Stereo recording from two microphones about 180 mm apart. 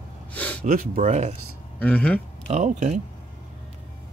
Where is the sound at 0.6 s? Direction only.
50° right (ahead or behind).